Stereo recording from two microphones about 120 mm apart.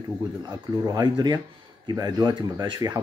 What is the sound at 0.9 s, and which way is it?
Speech, 35° right (ahead or behind).